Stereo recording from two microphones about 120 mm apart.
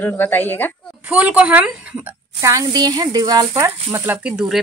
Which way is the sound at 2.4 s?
30° right (ahead or behind).